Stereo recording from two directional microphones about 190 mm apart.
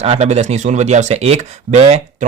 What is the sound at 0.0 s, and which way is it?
Speech, 35° right (ahead or behind).